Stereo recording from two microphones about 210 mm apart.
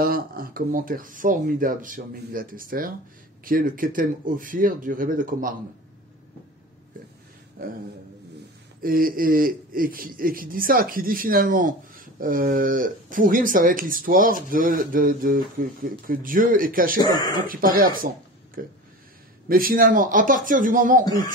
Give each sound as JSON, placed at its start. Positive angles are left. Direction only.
{"t": 0.0, "sound": "speech", "side_deg": -45}
{"t": 8.8, "sound": "a man's voice", "side_deg": -45}
{"t": 17.0, "sound": "speech", "side_deg": 20}
{"t": 17.5, "sound": "speech", "side_deg": -40}